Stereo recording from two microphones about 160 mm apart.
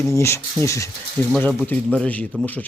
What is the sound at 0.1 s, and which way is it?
A man's voice, 15° left (ahead or behind).